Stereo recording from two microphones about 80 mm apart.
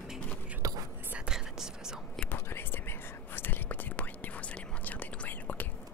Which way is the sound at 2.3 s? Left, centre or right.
Left.